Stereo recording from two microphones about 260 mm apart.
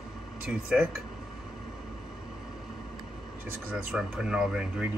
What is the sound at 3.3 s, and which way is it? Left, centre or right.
Speech, centre.